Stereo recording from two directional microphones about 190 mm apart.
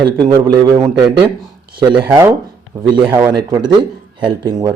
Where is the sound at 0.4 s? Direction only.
20° right (ahead or behind).